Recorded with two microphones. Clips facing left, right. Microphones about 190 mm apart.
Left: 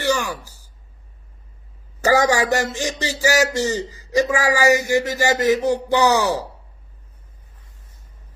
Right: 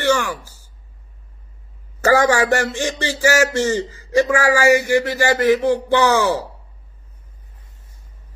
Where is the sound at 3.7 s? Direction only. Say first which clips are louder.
Right 3 dB; 15° left (ahead or behind).